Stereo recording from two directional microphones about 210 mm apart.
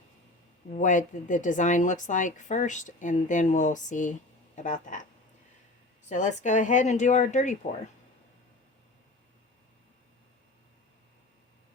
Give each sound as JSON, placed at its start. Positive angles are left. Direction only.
{"t": 0.7, "sound": "speech", "side_deg": 35}
{"t": 6.1, "sound": "speech", "side_deg": 35}